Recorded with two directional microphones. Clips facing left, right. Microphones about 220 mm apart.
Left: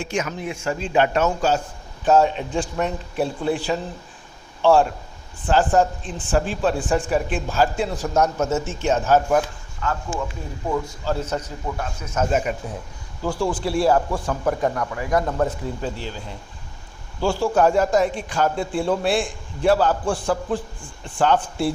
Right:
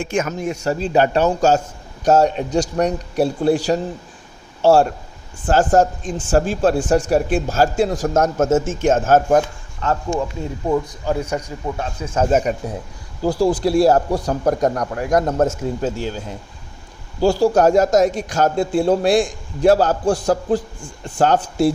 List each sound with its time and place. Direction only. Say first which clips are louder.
0.0 s a man's voice: right 5 dB; 50° right (ahead or behind)
10.1 s speech: right 8 dB; centre (ahead or behind)
10.7 s speech: right 4 dB; 15° right (ahead or behind)
11.8 s a man's voice: right 5 dB; 30° right (ahead or behind)